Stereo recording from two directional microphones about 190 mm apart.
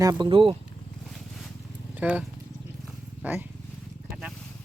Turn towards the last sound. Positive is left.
turn(degrees=-5)  # may be behind; listen again after turning